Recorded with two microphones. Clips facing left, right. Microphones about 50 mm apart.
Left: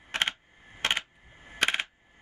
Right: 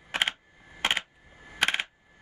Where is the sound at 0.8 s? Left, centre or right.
Centre.